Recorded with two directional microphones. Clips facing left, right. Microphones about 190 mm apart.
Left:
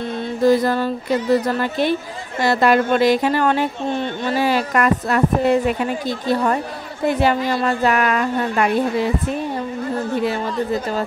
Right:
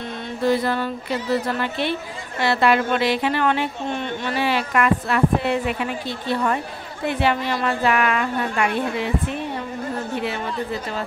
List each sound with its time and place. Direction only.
0.4 s speech: 40° left (ahead or behind)